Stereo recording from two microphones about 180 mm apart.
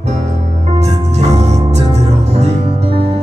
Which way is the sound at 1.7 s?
35° right (ahead or behind).